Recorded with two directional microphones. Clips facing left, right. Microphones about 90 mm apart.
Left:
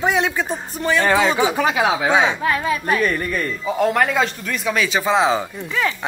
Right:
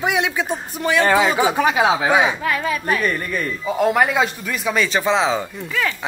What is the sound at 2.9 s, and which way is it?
Speech, centre (ahead or behind).